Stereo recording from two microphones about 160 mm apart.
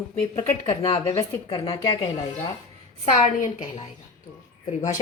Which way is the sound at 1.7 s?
25° left (ahead or behind).